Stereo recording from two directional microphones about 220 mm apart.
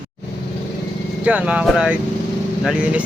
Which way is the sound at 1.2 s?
5° right (ahead or behind).